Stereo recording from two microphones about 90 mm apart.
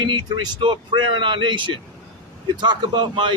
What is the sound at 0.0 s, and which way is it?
A man's voice, 55° right (ahead or behind).